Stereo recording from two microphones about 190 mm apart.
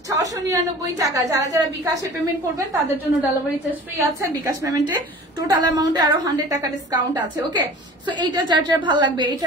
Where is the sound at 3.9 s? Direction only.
15° right (ahead or behind).